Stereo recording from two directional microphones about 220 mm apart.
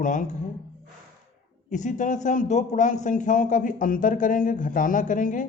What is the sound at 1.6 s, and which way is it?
A man's voice, 35° left (ahead or behind).